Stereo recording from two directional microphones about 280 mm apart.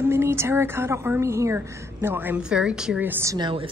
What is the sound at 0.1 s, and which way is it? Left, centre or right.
A woman's voice, centre.